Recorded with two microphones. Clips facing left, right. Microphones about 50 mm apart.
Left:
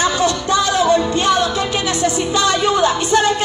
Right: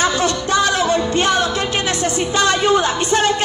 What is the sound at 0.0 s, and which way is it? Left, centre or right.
Music, right.